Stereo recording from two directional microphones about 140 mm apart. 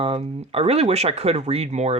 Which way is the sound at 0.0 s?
45° right (ahead or behind).